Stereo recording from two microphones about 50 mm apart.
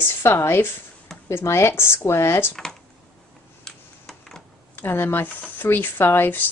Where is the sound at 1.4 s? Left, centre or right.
Left.